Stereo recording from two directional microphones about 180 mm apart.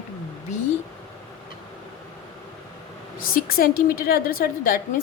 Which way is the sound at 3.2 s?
55° left (ahead or behind).